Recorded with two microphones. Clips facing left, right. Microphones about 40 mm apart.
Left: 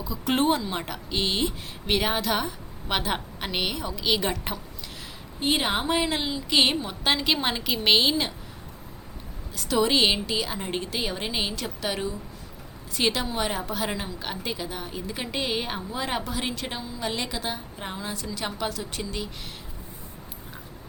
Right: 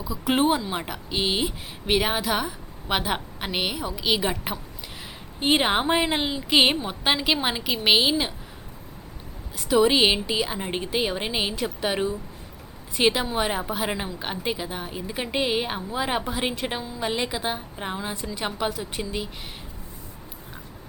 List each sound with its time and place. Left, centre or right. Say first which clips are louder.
0.0 s a woman's voice: right 2 dB; centre
5.4 s a woman's voice: right 4 dB; right; by 8.3 s centre
9.6 s a woman's voice: right 3 dB; centre